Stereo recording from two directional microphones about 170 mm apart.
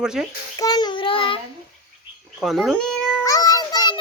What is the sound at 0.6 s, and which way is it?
Child singing, 25° left (ahead or behind).